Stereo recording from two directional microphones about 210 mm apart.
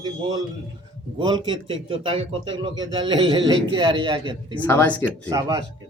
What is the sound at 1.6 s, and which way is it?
Speech, 25° right (ahead or behind).